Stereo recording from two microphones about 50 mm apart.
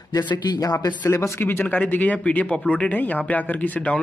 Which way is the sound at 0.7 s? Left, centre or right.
Left.